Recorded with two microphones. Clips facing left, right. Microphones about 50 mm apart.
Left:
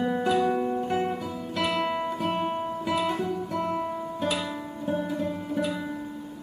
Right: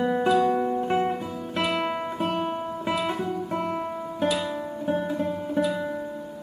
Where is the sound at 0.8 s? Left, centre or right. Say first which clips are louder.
Right 3 dB; right.